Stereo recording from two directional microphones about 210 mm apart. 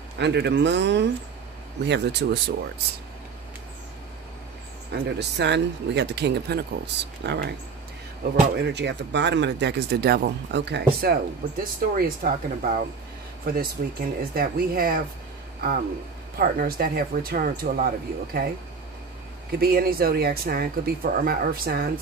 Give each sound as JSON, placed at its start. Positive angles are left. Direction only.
{"t": 0.2, "sound": "speech", "side_deg": -55}
{"t": 5.0, "sound": "speech", "side_deg": -55}
{"t": 16.3, "sound": "speech", "side_deg": -45}
{"t": 19.6, "sound": "speech", "side_deg": -45}